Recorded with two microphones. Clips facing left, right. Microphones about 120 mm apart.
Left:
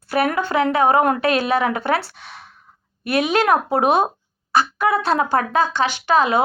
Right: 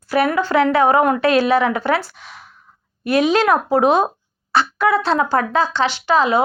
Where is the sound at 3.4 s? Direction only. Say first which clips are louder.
Right 2 dB; 25° left (ahead or behind).